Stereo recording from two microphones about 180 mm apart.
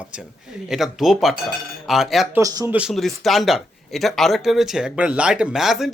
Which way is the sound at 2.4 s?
20° right (ahead or behind).